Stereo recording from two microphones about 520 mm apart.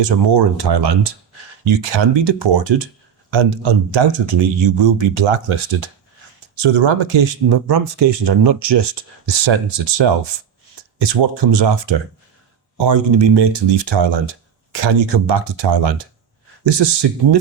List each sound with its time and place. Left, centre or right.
0.0 s speech: right